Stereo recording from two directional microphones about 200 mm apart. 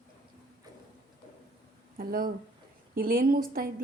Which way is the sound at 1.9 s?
45° right (ahead or behind).